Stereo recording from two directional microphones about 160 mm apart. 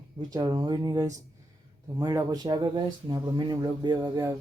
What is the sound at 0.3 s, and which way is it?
Speech, 20° right (ahead or behind).